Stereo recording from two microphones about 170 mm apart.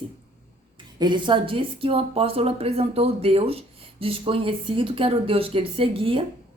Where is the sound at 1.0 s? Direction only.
25° right (ahead or behind).